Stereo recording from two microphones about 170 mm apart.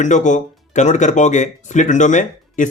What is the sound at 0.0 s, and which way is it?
Speech, 45° left (ahead or behind).